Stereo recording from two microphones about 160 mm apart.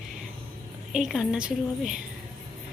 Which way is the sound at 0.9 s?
5° right (ahead or behind).